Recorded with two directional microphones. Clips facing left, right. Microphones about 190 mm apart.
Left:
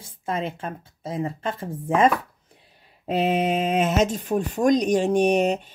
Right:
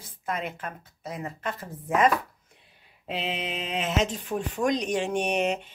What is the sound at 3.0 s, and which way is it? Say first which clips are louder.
Speech: left 10 dB; 45° left (ahead or behind).